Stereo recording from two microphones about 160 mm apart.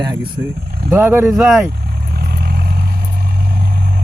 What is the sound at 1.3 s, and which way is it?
Speech, centre (ahead or behind).